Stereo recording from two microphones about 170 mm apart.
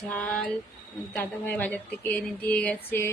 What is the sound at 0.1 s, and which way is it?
Speech, 10° left (ahead or behind).